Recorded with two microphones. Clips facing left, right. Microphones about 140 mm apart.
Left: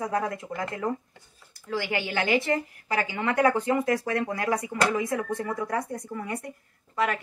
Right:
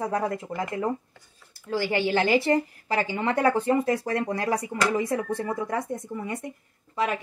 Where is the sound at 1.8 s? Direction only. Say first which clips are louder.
Right 6 dB; 30° right (ahead or behind).